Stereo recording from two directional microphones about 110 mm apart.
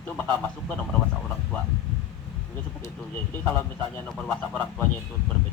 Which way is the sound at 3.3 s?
20° left (ahead or behind).